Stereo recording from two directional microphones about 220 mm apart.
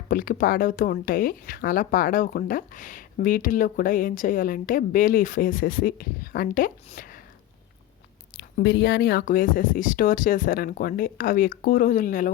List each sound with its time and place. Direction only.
0.1 s speech: 40° left (ahead or behind)
8.4 s speech: 50° left (ahead or behind)